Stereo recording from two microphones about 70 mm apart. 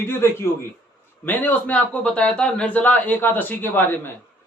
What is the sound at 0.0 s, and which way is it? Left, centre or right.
A man's voice, left.